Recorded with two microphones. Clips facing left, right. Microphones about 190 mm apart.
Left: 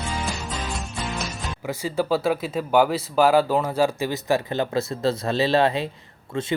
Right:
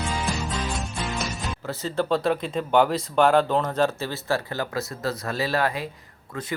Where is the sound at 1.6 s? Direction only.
10° left (ahead or behind).